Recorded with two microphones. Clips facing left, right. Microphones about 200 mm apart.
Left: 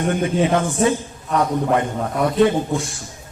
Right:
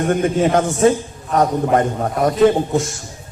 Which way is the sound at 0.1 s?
45° right (ahead or behind).